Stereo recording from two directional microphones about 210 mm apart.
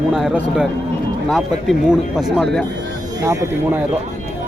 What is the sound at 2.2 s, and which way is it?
Speech, centre (ahead or behind).